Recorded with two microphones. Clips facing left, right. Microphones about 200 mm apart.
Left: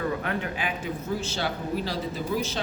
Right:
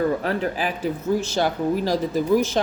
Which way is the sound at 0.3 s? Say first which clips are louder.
Right 6 dB; 35° right (ahead or behind).